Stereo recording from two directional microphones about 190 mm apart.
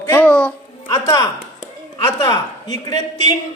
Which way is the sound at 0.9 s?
15° left (ahead or behind).